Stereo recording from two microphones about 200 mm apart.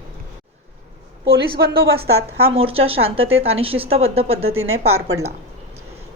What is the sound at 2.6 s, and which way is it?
Speech, 30° right (ahead or behind).